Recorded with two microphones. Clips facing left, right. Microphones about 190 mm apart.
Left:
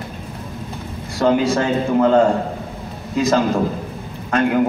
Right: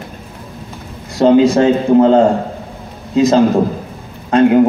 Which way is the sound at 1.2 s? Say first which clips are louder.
Right 7 dB; 25° right (ahead or behind).